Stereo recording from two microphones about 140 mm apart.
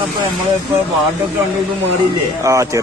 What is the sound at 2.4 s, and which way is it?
Speech, 25° right (ahead or behind).